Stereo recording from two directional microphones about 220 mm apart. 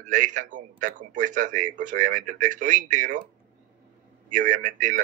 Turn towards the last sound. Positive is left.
turn(degrees=-35)  # may be behind; listen again after turning